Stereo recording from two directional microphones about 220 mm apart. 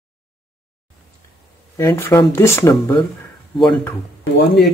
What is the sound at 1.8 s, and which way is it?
Speech, 10° left (ahead or behind).